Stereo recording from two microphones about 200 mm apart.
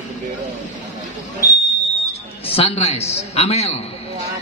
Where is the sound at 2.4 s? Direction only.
30° left (ahead or behind).